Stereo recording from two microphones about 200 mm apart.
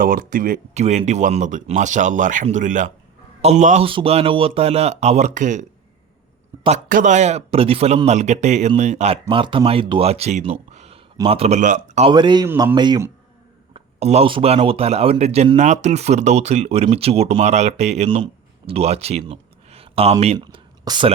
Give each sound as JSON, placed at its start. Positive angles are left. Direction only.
{"t": 0.0, "sound": "speech", "side_deg": -45}
{"t": 12.1, "sound": "speech", "side_deg": -20}
{"t": 13.7, "sound": "speech", "side_deg": -30}
{"t": 20.4, "sound": "a sound", "side_deg": -20}